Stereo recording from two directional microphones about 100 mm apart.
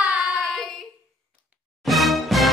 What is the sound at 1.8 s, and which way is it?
Music, centre (ahead or behind).